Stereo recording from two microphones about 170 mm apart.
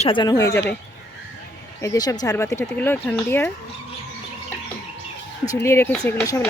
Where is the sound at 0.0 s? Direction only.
30° left (ahead or behind).